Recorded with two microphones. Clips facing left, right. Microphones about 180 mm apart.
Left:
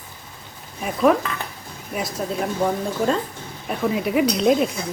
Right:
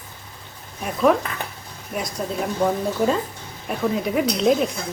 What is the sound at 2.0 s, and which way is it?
Speech, centre (ahead or behind).